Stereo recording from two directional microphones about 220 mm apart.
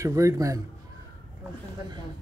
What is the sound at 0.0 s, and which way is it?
Speech, 15° right (ahead or behind).